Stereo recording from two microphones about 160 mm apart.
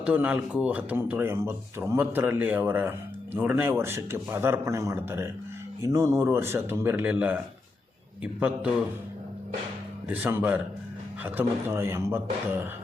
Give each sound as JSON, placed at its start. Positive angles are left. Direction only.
{"t": 0.0, "sound": "speech", "side_deg": -10}
{"t": 10.1, "sound": "speech", "side_deg": -10}